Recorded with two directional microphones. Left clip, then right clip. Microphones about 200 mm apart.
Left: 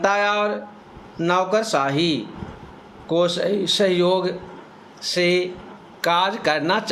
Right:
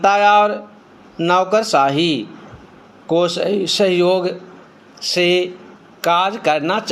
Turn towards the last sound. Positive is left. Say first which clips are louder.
# right 3 dB
turn(degrees=-10)  # may be behind; listen again after turning